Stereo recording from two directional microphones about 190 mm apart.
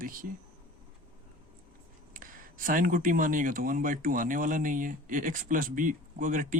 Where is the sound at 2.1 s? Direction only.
45° right (ahead or behind).